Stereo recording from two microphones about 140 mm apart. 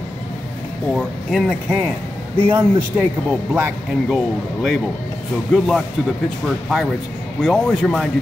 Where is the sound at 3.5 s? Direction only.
5° right (ahead or behind).